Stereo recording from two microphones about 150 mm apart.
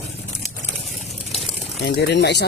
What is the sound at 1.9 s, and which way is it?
Speech, 90° left.